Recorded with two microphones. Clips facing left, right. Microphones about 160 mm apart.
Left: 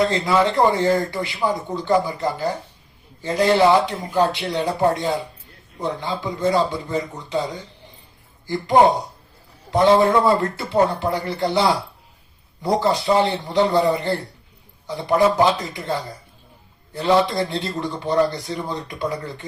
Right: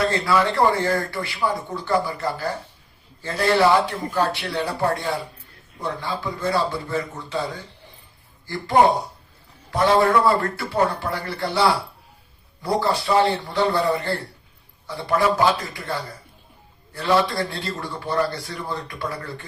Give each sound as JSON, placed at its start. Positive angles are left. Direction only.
{"t": 0.0, "sound": "speech", "side_deg": 20}